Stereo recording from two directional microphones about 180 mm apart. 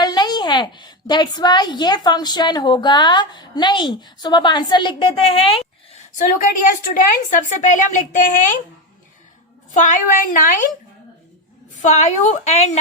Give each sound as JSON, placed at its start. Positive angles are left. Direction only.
{"t": 0.0, "sound": "a woman's voice", "side_deg": 25}
{"t": 9.7, "sound": "a woman's voice", "side_deg": 45}
{"t": 11.8, "sound": "a woman's voice", "side_deg": 40}